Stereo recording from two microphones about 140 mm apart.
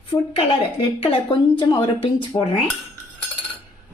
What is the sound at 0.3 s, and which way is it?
A woman's voice, 40° left (ahead or behind).